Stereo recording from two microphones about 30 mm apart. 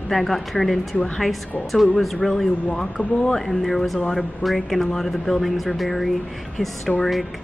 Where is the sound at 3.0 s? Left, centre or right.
Right.